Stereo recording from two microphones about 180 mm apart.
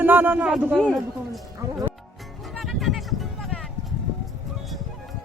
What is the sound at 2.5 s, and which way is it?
Music, centre (ahead or behind).